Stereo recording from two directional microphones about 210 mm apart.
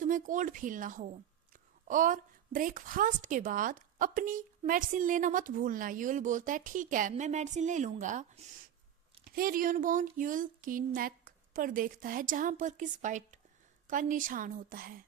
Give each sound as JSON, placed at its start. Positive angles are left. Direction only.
{"t": 0.0, "sound": "a woman's voice", "side_deg": -40}
{"t": 9.3, "sound": "a woman's voice", "side_deg": -45}